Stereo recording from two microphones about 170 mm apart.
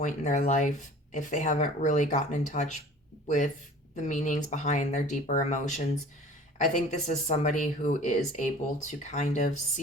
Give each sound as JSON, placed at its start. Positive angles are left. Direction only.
{"t": 0.0, "sound": "speech", "side_deg": 45}